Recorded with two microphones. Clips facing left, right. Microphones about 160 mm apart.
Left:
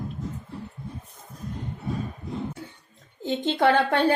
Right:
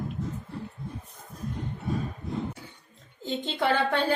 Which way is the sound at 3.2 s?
55° left (ahead or behind).